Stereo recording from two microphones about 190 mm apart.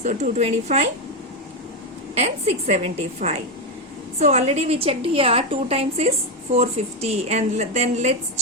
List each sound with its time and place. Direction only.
0.0 s a woman's voice: 40° right (ahead or behind)
2.1 s a woman's voice: 35° right (ahead or behind)